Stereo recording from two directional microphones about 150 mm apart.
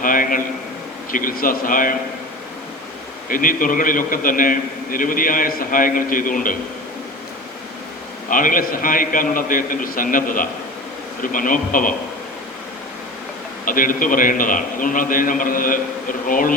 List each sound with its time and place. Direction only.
0.0 s a man's voice: 65° left (ahead or behind)
3.2 s a man's voice: 65° left (ahead or behind)
8.3 s a man's voice: 65° left (ahead or behind)
13.7 s a man's voice: 65° left (ahead or behind)